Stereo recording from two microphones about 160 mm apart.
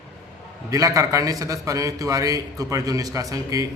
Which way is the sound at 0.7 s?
20° right (ahead or behind).